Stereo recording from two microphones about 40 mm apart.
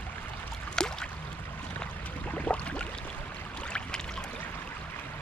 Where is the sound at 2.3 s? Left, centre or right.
Left.